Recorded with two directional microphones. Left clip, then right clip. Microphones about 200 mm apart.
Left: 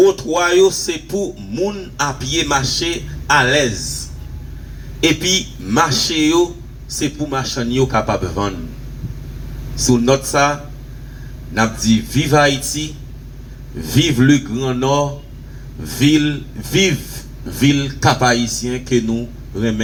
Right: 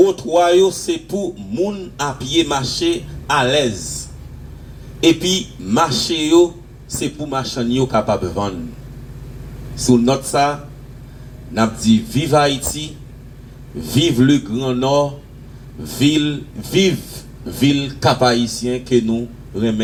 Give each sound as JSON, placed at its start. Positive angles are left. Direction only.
{"t": 0.0, "sound": "speech", "side_deg": -55}
{"t": 4.9, "sound": "speech", "side_deg": -55}
{"t": 9.7, "sound": "speech", "side_deg": -55}
{"t": 13.8, "sound": "speech", "side_deg": -55}